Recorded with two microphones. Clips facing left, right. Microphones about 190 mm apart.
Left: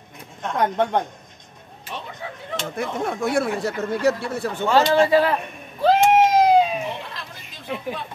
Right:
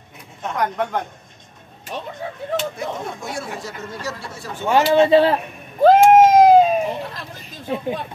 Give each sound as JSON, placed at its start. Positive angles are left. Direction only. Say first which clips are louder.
{"t": 0.6, "sound": "speech", "louder": "left 2 dB", "side_deg": 25}
{"t": 2.8, "sound": "speech", "louder": "left 4 dB", "side_deg": 60}
{"t": 4.9, "sound": "speech", "louder": "right 3 dB", "side_deg": -25}
{"t": 5.8, "sound": "a sound", "louder": "right 5 dB", "side_deg": -50}
{"t": 7.7, "sound": "speech", "louder": "right 5 dB", "side_deg": -25}